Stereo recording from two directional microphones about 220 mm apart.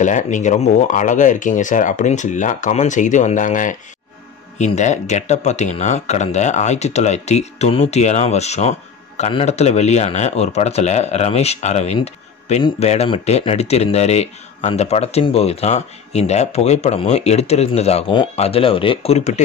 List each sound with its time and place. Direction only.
0.0 s speech: 35° left (ahead or behind)